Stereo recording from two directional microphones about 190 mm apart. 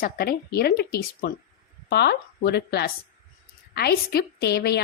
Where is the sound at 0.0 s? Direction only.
55° left (ahead or behind).